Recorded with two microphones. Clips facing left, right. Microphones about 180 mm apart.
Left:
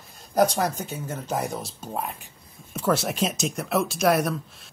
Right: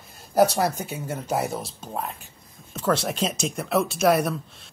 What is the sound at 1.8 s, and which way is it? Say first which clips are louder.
Speech: even; 10° left (ahead or behind).